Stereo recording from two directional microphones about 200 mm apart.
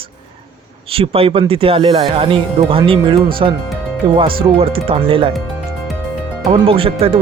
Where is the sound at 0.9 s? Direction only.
30° right (ahead or behind).